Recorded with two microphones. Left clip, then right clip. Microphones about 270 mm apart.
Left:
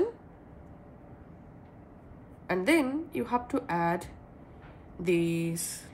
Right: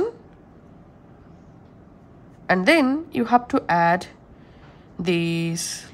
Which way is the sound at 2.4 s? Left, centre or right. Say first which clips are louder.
Right 9 dB; right.